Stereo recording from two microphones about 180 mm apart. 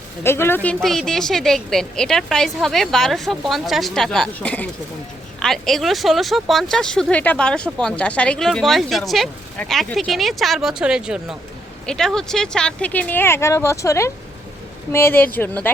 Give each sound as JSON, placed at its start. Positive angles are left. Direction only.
{"t": 0.2, "sound": "speech", "side_deg": 15}